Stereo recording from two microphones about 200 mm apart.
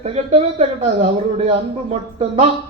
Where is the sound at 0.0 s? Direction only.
30° right (ahead or behind).